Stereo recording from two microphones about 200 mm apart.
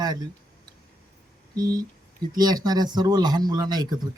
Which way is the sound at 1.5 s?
20° right (ahead or behind).